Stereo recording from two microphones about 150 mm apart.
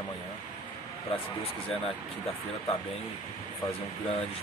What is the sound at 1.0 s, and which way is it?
Speech, 40° left (ahead or behind).